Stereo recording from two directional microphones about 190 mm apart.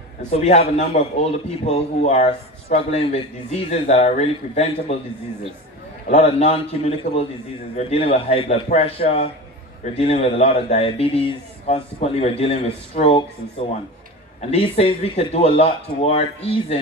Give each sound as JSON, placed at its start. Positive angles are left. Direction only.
{"t": 0.2, "sound": "a man's voice", "side_deg": 35}
{"t": 6.0, "sound": "a man's voice", "side_deg": 35}
{"t": 14.5, "sound": "a man's voice", "side_deg": 35}